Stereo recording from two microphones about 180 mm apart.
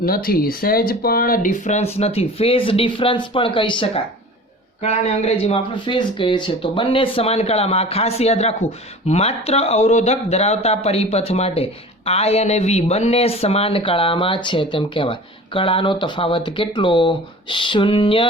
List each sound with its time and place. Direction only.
0.0 s speech: 55° left (ahead or behind); by 18.3 s 30° left (ahead or behind)